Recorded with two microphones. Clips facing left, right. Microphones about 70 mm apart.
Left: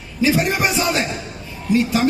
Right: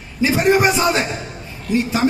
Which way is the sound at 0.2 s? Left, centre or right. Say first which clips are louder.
Right 3 dB; right.